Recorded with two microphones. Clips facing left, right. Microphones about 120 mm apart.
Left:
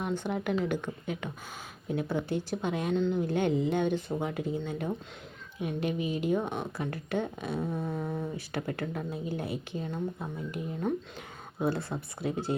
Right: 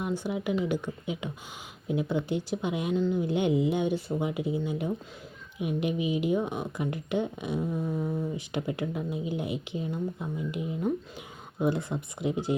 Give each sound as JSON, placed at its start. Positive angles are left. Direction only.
{"t": 0.0, "sound": "speech", "side_deg": -10}
{"t": 3.2, "sound": "speech", "side_deg": -15}